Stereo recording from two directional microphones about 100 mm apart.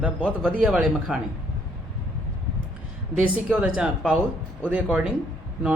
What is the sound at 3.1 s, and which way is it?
A man's voice, 15° right (ahead or behind).